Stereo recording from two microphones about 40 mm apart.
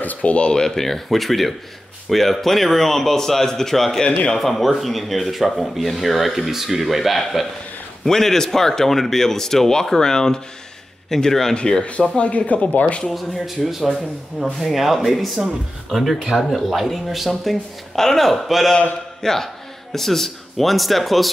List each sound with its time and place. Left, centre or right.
0.0 s a sound: left
0.5 s speech: centre
8.0 s speech: centre
12.2 s speech: left
13.8 s speech: centre
17.9 s a man's voice: centre